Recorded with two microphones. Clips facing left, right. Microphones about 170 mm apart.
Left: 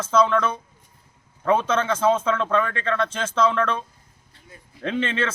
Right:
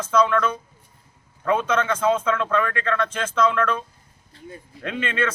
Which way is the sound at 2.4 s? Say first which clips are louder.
Even; 30° left (ahead or behind).